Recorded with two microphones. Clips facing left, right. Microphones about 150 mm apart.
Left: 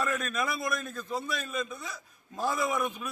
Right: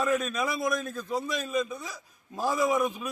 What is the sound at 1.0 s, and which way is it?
A man's voice, 15° right (ahead or behind).